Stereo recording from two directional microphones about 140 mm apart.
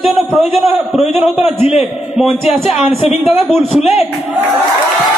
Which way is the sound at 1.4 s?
50° left (ahead or behind).